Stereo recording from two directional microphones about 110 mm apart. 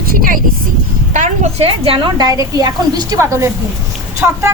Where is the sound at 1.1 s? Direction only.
75° right (ahead or behind).